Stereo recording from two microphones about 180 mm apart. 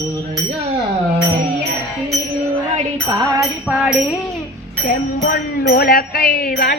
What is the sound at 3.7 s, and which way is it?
Music, 5° right (ahead or behind).